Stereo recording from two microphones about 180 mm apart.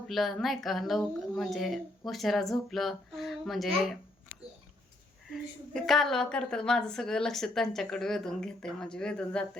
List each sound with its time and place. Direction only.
0.1 s a woman's voice: centre (ahead or behind)
5.3 s a woman's voice: centre (ahead or behind)